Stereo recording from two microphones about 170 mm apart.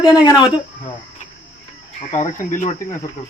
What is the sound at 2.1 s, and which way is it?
Cricket, 45° left (ahead or behind).